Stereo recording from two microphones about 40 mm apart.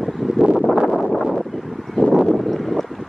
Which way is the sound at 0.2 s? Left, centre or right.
Centre.